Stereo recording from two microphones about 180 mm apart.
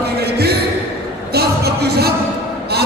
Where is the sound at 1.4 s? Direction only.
60° right (ahead or behind).